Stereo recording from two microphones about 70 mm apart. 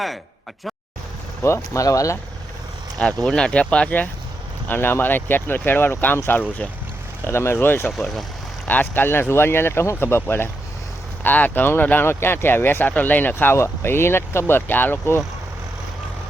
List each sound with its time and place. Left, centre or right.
1.4 s speech: left
3.2 s speech: centre; by 7.9 s left
7.9 s speech: centre
8.6 s speech: left